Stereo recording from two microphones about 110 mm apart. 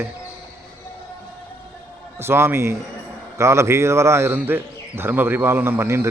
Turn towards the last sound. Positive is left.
turn(degrees=-20)  # may be behind; listen again after turning